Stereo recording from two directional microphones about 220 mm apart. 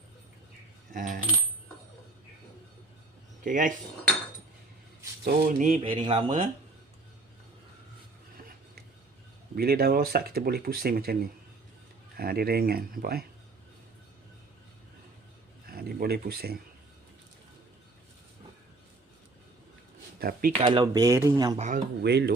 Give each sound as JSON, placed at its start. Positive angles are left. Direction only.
{"t": 0.9, "sound": "coin", "side_deg": -40}
{"t": 3.4, "sound": "speech", "side_deg": -35}
{"t": 5.2, "sound": "speech", "side_deg": -40}
{"t": 9.6, "sound": "speech", "side_deg": -45}
{"t": 15.6, "sound": "a sound", "side_deg": -45}
{"t": 20.1, "sound": "speech", "side_deg": -40}
{"t": 20.6, "sound": "speech", "side_deg": -20}
{"t": 22.0, "sound": "speech", "side_deg": -50}